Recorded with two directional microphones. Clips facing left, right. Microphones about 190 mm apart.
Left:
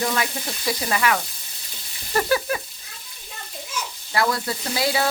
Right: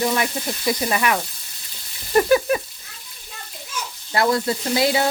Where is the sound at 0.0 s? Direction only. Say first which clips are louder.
Right 3 dB; 20° right (ahead or behind).